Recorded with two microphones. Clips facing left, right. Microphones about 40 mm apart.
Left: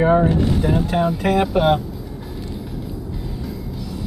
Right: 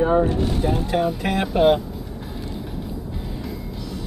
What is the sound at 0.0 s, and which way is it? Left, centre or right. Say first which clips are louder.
Vehicle: left 3 dB; left.